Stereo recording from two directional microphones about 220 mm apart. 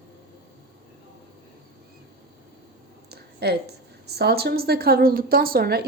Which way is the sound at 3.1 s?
45° right (ahead or behind).